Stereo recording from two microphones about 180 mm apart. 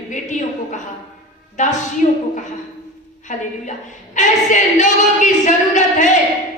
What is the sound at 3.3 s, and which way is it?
A woman's voice, 45° left (ahead or behind).